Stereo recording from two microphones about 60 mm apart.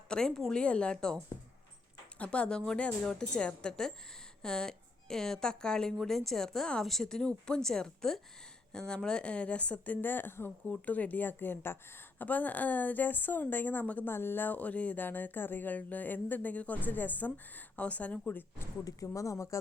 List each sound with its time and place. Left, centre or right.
0.1 s a woman's voice: centre; by 10.5 s left
10.7 s a woman's voice: left
14.1 s speech: left
18.9 s speech: left